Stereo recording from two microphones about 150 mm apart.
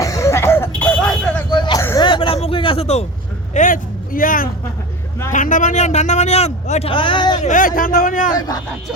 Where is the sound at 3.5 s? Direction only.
65° left (ahead or behind); by 7.4 s 30° left (ahead or behind).